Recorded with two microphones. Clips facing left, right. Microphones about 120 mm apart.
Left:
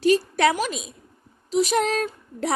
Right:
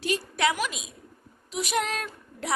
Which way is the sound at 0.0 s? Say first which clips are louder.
Left 8 dB; 40° left (ahead or behind).